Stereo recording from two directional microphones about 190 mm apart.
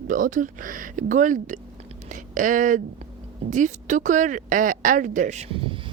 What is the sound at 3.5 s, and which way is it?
Speech, 40° right (ahead or behind).